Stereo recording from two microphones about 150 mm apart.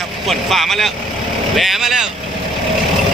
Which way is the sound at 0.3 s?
Centre (ahead or behind).